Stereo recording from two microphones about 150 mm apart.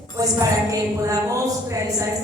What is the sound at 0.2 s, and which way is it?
A woman's voice, 25° right (ahead or behind).